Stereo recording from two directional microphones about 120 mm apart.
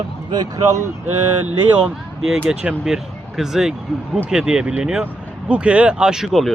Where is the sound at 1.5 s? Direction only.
5° right (ahead or behind).